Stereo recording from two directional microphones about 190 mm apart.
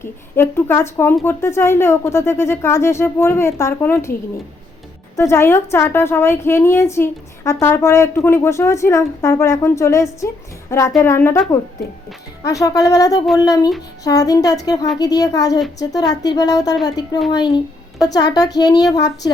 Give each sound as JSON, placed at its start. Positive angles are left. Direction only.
{"t": 0.0, "sound": "a woman's voice", "side_deg": 10}
{"t": 5.1, "sound": "a woman's voice", "side_deg": 15}